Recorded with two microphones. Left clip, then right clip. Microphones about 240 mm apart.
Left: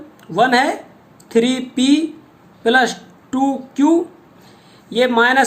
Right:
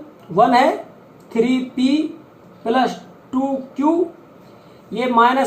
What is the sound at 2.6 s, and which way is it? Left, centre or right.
Speech, left.